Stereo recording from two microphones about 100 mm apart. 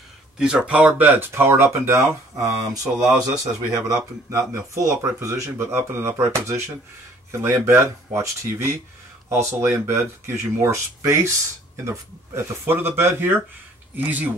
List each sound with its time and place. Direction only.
0.4 s a man's voice: 10° right (ahead or behind)